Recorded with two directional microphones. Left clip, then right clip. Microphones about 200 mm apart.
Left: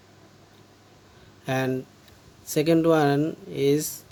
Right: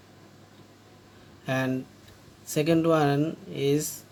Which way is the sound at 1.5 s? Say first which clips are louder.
Left 2 dB; 50° left (ahead or behind).